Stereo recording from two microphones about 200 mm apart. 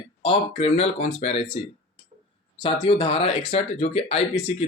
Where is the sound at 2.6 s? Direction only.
25° left (ahead or behind).